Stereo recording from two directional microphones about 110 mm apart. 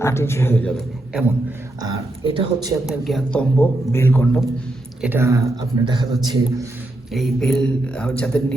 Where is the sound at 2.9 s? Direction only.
Centre (ahead or behind).